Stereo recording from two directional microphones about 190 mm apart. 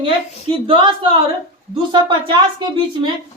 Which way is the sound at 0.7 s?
25° right (ahead or behind).